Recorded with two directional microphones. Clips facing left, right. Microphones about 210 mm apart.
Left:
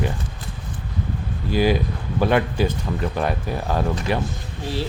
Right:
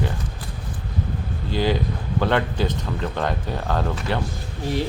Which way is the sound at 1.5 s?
10° left (ahead or behind).